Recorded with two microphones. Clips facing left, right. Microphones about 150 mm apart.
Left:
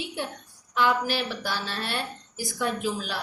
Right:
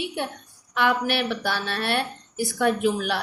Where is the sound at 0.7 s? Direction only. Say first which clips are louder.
Right 2 dB; 65° right (ahead or behind).